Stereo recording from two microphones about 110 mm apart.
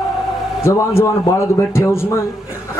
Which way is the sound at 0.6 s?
25° left (ahead or behind).